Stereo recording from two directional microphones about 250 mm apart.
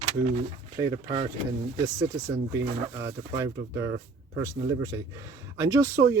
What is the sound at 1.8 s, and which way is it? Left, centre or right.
Speech, centre.